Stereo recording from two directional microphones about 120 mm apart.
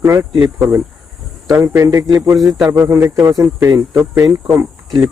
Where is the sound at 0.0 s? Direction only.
25° right (ahead or behind).